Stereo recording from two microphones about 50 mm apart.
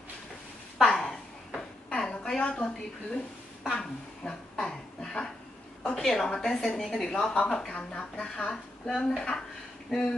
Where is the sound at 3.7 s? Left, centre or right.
Centre.